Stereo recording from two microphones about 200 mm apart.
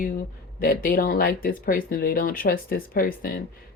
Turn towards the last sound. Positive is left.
turn(degrees=45)  # may be behind; listen again after turning